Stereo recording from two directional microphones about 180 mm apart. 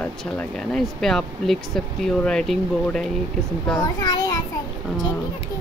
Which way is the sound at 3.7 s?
15° left (ahead or behind).